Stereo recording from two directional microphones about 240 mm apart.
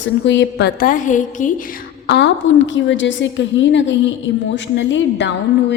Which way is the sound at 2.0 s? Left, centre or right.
Left.